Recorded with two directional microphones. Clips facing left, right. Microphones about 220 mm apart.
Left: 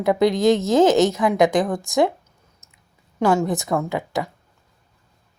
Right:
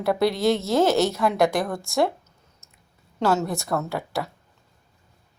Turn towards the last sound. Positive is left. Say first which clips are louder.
# left 4 dB
turn(degrees=15)  # may be behind; listen again after turning